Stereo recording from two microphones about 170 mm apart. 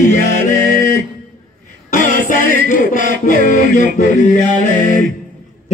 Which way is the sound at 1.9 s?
50° left (ahead or behind).